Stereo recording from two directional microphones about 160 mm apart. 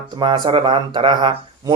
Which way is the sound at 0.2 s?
30° right (ahead or behind).